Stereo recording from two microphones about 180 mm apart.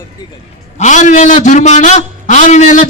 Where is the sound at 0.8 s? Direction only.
40° left (ahead or behind).